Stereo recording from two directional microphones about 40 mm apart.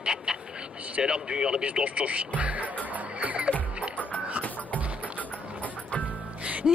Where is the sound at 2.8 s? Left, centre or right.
Right.